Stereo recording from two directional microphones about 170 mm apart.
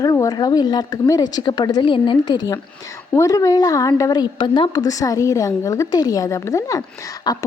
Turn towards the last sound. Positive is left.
turn(degrees=20)  # may be behind; listen again after turning